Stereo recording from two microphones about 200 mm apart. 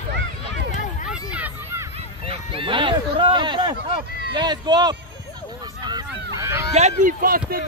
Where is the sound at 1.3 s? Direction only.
10° right (ahead or behind).